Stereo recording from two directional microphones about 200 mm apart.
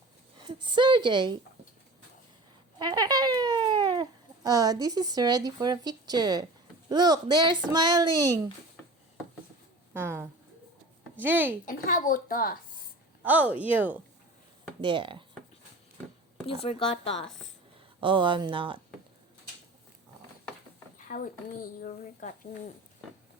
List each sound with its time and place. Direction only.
0.4 s speech: 25° right (ahead or behind)
2.7 s speech: 20° right (ahead or behind)
9.9 s speech: 10° right (ahead or behind)
11.6 s a woman's voice: 40° left (ahead or behind)
13.2 s speech: 10° right (ahead or behind)
14.8 s speech: 25° right (ahead or behind)
16.5 s speech: 30° left (ahead or behind)
18.0 s speech: 25° right (ahead or behind)
21.1 s a woman's voice: 45° left (ahead or behind)